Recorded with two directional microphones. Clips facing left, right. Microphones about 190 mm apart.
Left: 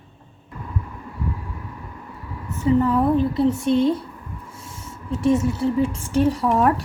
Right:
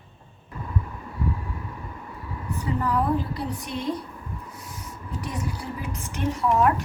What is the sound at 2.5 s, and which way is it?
Speech, 25° left (ahead or behind).